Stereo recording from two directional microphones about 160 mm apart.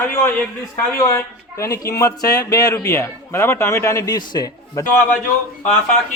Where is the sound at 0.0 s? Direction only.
15° left (ahead or behind).